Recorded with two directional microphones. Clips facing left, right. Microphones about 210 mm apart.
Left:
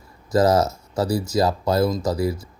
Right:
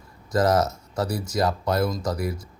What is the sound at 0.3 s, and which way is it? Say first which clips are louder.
Speech: left 3 dB; 5° left (ahead or behind).